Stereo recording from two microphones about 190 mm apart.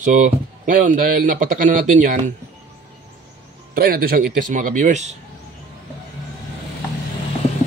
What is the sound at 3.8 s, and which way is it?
Speech, 50° right (ahead or behind).